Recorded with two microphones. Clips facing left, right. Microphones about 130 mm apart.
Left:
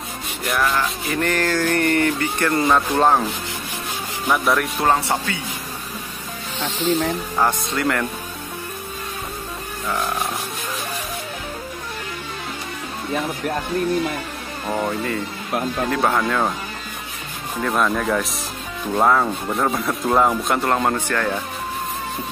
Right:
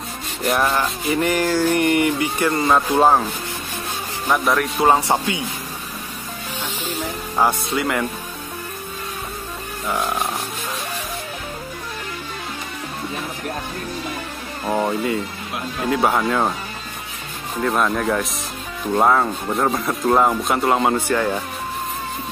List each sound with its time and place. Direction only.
0.5 s rub: 25° right (ahead or behind)
1.1 s speech: 10° right (ahead or behind)
4.3 s speech: centre (ahead or behind)
4.8 s speech: 15° right (ahead or behind)
7.3 s speech: 10° right (ahead or behind)
14.7 s speech: 10° right (ahead or behind)
17.6 s speech: 5° right (ahead or behind)